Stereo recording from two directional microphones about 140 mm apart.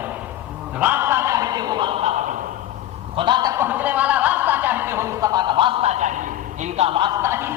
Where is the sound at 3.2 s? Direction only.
35° right (ahead or behind).